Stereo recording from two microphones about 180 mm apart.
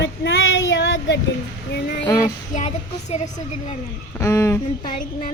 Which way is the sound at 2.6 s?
40° left (ahead or behind).